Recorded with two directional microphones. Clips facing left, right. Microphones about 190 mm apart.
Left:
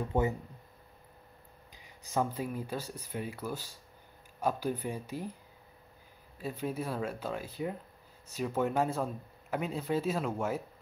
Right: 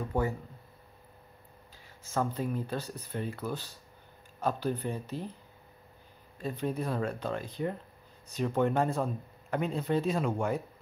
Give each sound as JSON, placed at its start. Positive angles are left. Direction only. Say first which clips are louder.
{"t": 0.1, "sound": "speech", "louder": "left 1 dB", "side_deg": 20}
{"t": 2.0, "sound": "speech", "louder": "right 1 dB", "side_deg": 10}
{"t": 6.3, "sound": "speech", "louder": "right 2 dB", "side_deg": 5}